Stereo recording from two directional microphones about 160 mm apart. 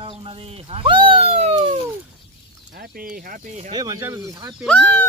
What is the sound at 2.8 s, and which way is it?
Speech, 60° right (ahead or behind).